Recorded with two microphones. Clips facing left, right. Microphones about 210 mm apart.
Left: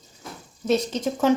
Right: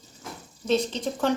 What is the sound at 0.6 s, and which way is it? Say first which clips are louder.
Speech: left 2 dB; 10° left (ahead or behind).